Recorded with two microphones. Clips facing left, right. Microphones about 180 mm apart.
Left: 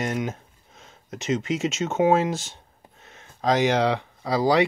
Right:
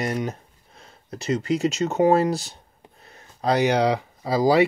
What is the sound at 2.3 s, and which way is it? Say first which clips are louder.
Speech: right 3 dB; 35° right (ahead or behind).